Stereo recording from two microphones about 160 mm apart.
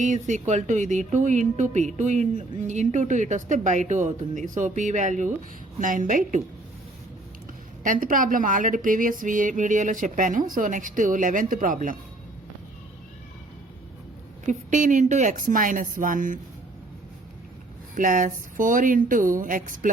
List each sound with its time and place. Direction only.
0.0 s speech: 50° right (ahead or behind)
7.9 s speech: 60° right (ahead or behind)
14.4 s speech: 55° right (ahead or behind)
17.9 s speech: 55° right (ahead or behind)